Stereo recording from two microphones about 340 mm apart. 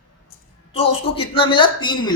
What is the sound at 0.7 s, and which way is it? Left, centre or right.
A woman's voice, centre.